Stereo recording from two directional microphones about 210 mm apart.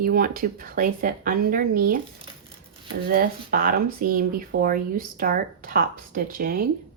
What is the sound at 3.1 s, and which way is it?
Speech, 45° right (ahead or behind).